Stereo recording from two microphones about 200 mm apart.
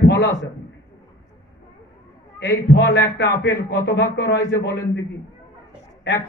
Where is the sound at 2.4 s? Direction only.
55° left (ahead or behind).